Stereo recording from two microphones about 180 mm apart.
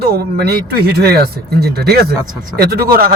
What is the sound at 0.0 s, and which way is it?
Speech, 65° right (ahead or behind).